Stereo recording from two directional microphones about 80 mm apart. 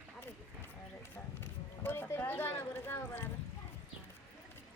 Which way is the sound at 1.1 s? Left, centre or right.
Left.